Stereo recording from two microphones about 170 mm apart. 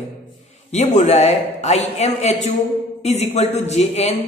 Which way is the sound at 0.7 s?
40° left (ahead or behind).